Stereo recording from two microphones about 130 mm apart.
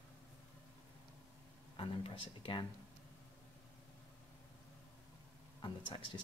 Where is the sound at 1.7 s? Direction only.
40° left (ahead or behind).